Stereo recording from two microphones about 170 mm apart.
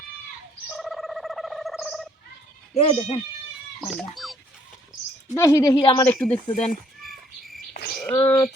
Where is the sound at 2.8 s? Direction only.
35° left (ahead or behind).